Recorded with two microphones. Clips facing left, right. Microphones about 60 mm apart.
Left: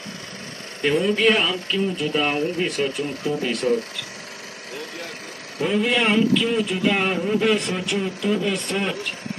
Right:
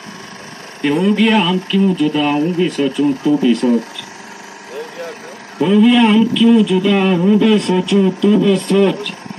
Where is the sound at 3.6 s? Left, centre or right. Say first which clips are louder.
Right 2 dB; centre.